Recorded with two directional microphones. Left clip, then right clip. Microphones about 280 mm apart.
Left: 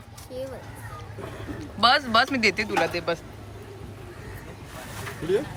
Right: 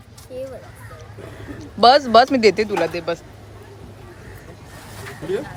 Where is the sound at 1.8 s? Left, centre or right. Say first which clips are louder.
Right 8 dB; centre.